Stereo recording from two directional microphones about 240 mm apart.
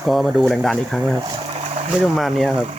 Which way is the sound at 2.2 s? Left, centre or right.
Centre.